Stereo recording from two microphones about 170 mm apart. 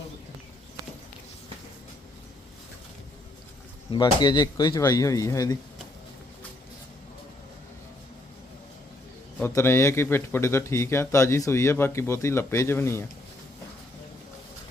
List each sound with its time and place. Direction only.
3.9 s speech: 25° left (ahead or behind)
9.4 s a man's voice: 15° left (ahead or behind)